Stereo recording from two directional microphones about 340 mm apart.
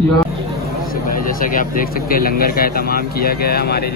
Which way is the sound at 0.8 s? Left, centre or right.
Left.